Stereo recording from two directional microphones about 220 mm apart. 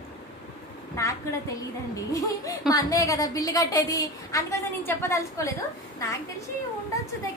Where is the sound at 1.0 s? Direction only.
15° left (ahead or behind).